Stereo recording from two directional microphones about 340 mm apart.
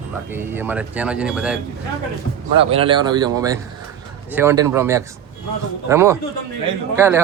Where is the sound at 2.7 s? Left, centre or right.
Centre.